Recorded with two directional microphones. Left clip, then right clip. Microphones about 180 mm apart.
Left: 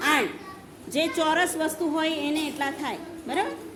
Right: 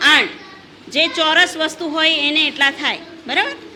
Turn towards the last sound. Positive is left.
turn(degrees=0)  # may be behind; listen again after turning